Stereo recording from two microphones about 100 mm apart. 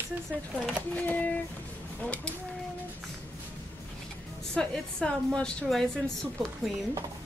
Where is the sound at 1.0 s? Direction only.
15° left (ahead or behind).